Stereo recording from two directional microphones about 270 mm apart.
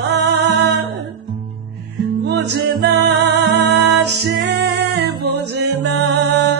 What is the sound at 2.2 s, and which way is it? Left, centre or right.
Music, right.